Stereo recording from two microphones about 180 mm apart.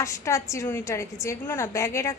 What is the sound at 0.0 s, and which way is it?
A woman's voice, 15° left (ahead or behind).